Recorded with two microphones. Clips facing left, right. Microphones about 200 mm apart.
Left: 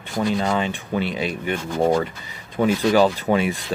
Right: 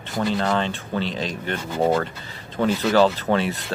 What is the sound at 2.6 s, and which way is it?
Speech, 10° left (ahead or behind).